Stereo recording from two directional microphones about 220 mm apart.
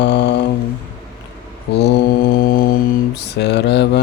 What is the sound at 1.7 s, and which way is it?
Mantra, 50° left (ahead or behind).